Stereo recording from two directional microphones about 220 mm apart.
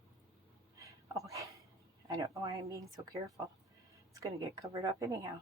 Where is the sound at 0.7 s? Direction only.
15° right (ahead or behind).